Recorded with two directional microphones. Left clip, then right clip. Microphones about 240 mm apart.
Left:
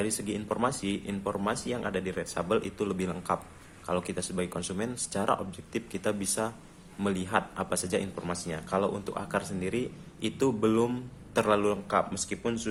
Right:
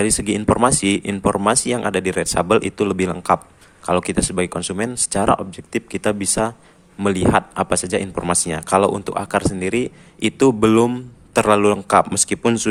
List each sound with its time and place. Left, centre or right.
0.0 s speech: right